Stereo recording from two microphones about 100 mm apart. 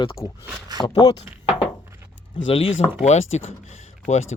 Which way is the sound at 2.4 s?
70° left (ahead or behind).